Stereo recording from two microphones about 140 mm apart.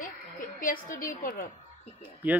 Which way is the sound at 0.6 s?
85° left.